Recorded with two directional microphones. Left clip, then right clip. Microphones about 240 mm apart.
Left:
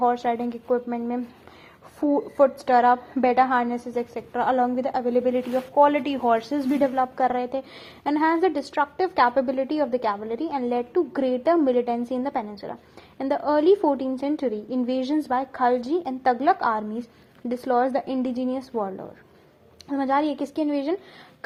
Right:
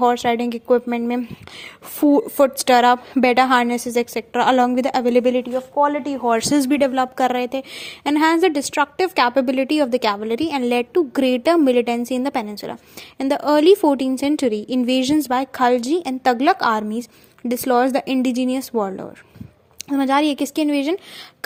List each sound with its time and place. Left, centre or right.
0.0 s a woman's voice: right
5.5 s speech: right
6.5 s a woman's voice: right